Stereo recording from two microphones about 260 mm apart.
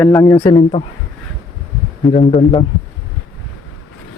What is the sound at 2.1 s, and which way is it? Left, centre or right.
Speech, left.